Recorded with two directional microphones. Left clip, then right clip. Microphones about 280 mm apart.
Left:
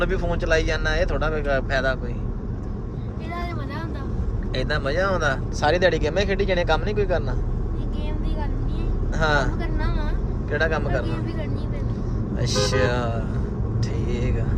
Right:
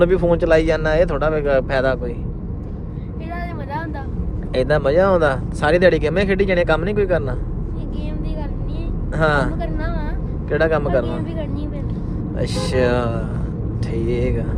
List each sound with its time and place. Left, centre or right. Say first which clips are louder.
0.0 s speech: right 9 dB; centre
4.5 s speech: right 9 dB; centre
9.1 s speech: right 4 dB; right
12.4 s speech: right 3 dB; right